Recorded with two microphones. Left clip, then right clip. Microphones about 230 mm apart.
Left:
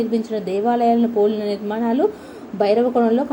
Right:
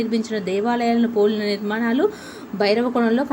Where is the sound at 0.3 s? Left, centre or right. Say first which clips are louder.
Left 2 dB; right.